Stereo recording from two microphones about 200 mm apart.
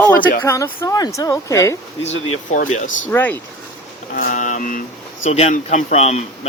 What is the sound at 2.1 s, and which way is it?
Speech, 90° left.